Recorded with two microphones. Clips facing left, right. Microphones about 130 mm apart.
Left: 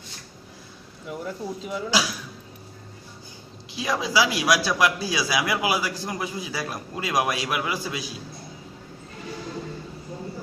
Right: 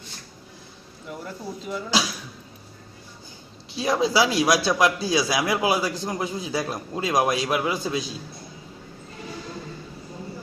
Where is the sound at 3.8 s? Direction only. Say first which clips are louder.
Right 3 dB; 30° right (ahead or behind).